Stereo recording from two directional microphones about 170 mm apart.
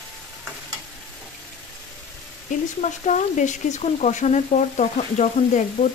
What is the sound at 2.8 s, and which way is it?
Speech, 45° left (ahead or behind).